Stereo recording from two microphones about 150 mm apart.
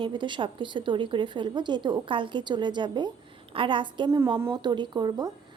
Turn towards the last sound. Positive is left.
turn(degrees=-30)  # may be behind; listen again after turning